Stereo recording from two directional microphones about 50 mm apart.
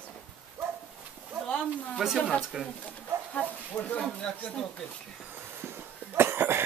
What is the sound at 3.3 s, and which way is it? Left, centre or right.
Speech, left.